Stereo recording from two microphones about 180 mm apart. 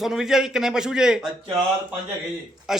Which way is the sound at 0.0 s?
Centre (ahead or behind).